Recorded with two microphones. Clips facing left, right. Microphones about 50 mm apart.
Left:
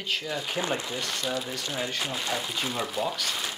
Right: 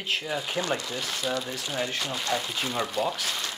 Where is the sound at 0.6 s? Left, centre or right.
Left.